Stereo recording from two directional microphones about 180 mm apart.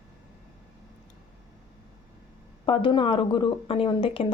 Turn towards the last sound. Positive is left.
turn(degrees=30)  # may be behind; listen again after turning